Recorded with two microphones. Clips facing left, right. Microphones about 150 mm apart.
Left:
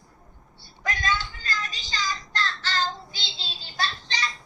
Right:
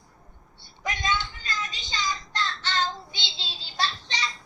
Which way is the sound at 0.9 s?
20° right (ahead or behind).